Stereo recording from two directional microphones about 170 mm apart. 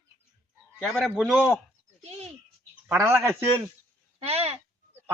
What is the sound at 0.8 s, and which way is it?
Speech, centre (ahead or behind).